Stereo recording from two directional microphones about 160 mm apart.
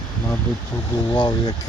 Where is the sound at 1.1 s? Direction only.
25° left (ahead or behind).